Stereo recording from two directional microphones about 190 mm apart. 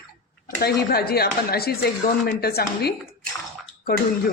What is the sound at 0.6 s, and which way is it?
Speech, 55° left (ahead or behind).